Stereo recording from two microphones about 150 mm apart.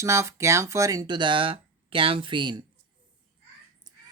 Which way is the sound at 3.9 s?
25° right (ahead or behind).